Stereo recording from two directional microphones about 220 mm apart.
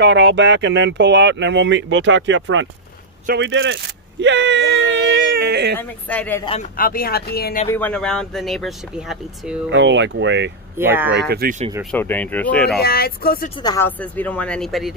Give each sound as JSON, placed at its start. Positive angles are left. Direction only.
{"t": 0.0, "sound": "speech", "side_deg": -50}
{"t": 4.2, "sound": "a sound", "side_deg": -55}
{"t": 5.8, "sound": "speech", "side_deg": 5}
{"t": 6.4, "sound": "speech", "side_deg": 25}
{"t": 6.8, "sound": "speech", "side_deg": 40}
{"t": 7.6, "sound": "speech", "side_deg": 10}
{"t": 9.7, "sound": "speech", "side_deg": -55}
{"t": 10.8, "sound": "speech", "side_deg": -10}
{"t": 11.1, "sound": "speech", "side_deg": -45}
{"t": 11.8, "sound": "speech", "side_deg": 5}
{"t": 12.8, "sound": "speech", "side_deg": 45}
{"t": 13.6, "sound": "speech", "side_deg": 20}
{"t": 13.8, "sound": "speech", "side_deg": 5}